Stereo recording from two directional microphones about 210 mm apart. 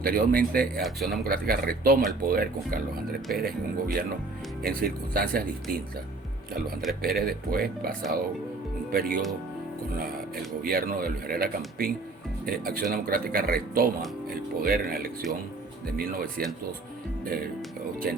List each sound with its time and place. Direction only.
0.0 s a man's voice: 45° right (ahead or behind)
0.8 s speech: centre (ahead or behind)
1.2 s a man's voice: 45° right (ahead or behind)
7.0 s a man's voice: 45° right (ahead or behind)
10.6 s a man's voice: 45° right (ahead or behind)